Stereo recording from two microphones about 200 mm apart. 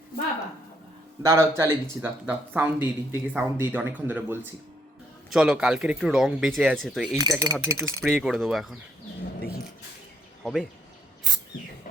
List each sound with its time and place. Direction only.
1.2 s speech: 15° right (ahead or behind); by 7.2 s centre (ahead or behind)
7.2 s cutlery: 20° right (ahead or behind)
7.6 s speech: 15° right (ahead or behind)
8.0 s speech: centre (ahead or behind)
10.4 s speech: centre (ahead or behind)